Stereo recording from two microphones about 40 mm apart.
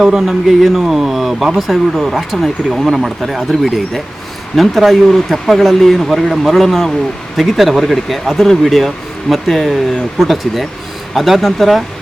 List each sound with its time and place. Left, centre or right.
0.0 s speech: centre
0.3 s speech: centre